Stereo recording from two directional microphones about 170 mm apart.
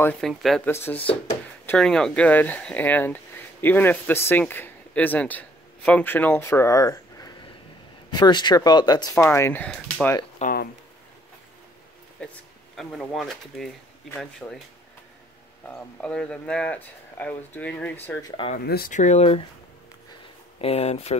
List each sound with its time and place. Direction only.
0.2 s speech: centre (ahead or behind)
0.7 s speech: 15° left (ahead or behind)
10.4 s a sound: 60° left (ahead or behind)
12.7 s speech: centre (ahead or behind)
15.7 s speech: 5° left (ahead or behind)
18.3 s speech: 30° left (ahead or behind)
18.7 s speech: 65° left (ahead or behind)
18.9 s speech: 40° left (ahead or behind)
20.6 s speech: 35° left (ahead or behind)